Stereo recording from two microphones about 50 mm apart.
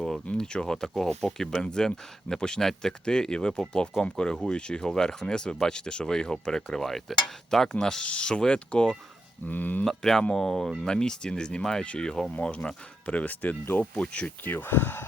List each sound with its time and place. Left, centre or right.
0.3 s speech: centre
9.5 s speech: left
9.8 s speech: centre
12.3 s speech: left
14.4 s speech: left